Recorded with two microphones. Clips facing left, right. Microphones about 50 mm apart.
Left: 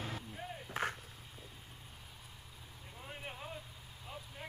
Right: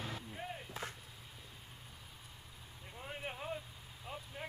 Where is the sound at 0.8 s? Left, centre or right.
Left.